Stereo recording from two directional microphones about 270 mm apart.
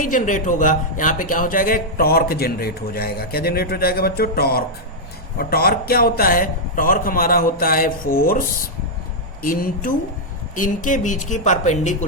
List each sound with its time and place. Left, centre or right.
0.0 s speech: left